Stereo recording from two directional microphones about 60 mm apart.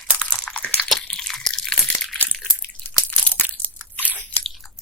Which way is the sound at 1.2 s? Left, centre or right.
Centre.